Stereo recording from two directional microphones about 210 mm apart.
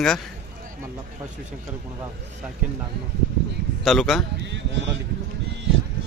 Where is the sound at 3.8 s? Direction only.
Centre (ahead or behind).